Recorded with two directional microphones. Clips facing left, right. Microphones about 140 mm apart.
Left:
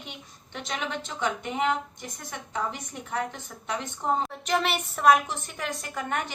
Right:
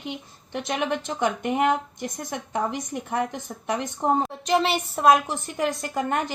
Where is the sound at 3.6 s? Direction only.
40° right (ahead or behind).